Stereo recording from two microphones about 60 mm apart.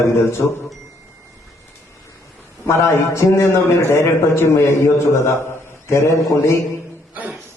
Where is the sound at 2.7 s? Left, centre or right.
Left.